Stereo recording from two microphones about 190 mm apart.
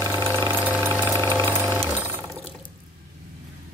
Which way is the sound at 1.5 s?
15° right (ahead or behind).